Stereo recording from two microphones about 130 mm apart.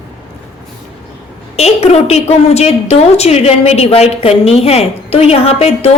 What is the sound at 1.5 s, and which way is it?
A woman's voice, 50° left (ahead or behind).